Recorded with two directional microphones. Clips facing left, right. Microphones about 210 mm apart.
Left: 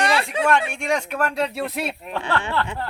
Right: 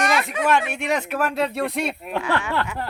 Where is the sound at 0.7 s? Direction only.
5° right (ahead or behind).